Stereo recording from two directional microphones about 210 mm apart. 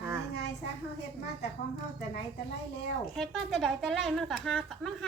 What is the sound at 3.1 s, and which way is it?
Speech, centre (ahead or behind).